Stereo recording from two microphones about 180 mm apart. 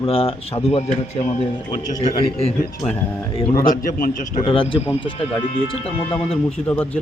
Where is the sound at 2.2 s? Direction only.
35° left (ahead or behind).